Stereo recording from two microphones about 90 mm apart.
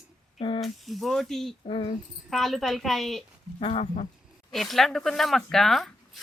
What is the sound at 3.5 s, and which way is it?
Cricket, 90° left.